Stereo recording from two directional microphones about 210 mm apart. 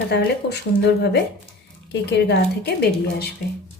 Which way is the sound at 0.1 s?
50° left (ahead or behind).